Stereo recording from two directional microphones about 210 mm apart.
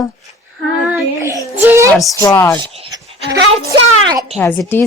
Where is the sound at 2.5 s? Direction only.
25° right (ahead or behind).